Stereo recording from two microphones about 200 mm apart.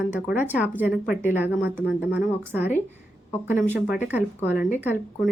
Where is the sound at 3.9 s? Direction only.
10° right (ahead or behind).